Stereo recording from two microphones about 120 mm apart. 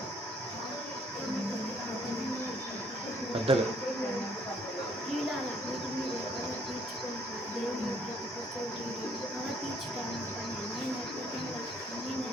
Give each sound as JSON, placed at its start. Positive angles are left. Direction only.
{"t": 3.5, "sound": "speech", "side_deg": -50}